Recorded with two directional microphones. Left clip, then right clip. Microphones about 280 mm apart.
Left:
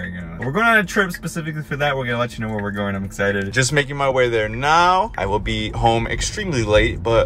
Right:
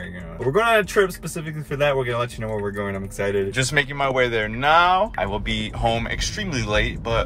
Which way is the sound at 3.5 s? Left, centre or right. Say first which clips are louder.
Left 2 dB; centre.